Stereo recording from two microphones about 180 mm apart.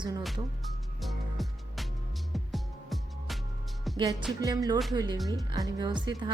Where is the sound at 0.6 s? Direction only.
Centre (ahead or behind).